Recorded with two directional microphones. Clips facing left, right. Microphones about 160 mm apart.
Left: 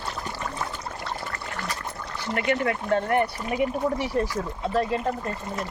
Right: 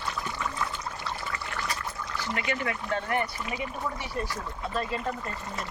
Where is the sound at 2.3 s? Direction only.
55° left (ahead or behind).